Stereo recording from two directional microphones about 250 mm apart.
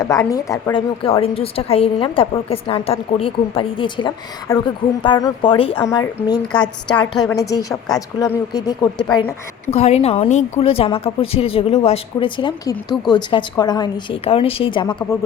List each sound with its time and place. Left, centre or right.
0.0 s a woman's voice: centre
9.7 s a woman's voice: left